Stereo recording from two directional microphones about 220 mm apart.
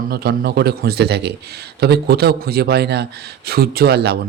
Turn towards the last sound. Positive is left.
turn(degrees=-45)  # may be behind; listen again after turning